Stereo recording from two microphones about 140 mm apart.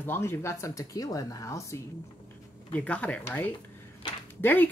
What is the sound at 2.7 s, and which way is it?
Speech, 10° left (ahead or behind).